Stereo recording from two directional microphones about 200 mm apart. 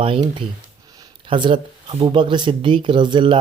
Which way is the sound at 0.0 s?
25° right (ahead or behind).